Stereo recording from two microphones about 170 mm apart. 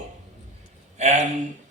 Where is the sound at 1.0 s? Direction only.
45° right (ahead or behind).